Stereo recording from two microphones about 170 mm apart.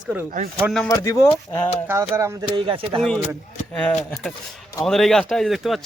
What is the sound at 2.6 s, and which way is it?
Speech, 30° right (ahead or behind).